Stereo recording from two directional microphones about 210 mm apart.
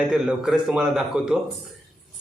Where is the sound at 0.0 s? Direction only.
Centre (ahead or behind).